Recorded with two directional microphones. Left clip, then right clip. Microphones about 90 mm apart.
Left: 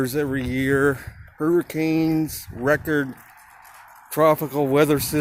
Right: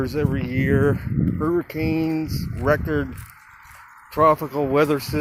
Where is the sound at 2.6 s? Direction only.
45° left (ahead or behind).